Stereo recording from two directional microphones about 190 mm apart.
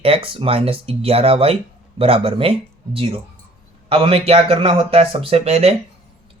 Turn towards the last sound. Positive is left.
turn(degrees=-30)  # may be behind; listen again after turning